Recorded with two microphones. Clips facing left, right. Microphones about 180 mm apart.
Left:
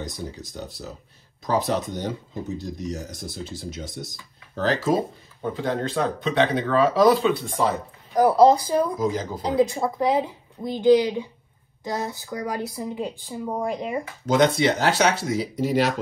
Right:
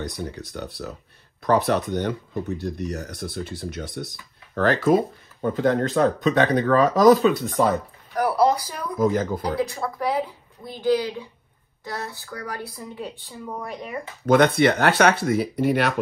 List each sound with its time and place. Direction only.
0.0 s speech: 60° right (ahead or behind)
8.1 s speech: 20° left (ahead or behind)
8.9 s speech: 55° right (ahead or behind)
9.4 s speech: 25° left (ahead or behind)
14.2 s speech: 55° right (ahead or behind)